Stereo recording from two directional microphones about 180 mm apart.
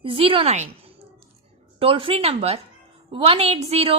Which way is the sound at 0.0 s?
30° right (ahead or behind).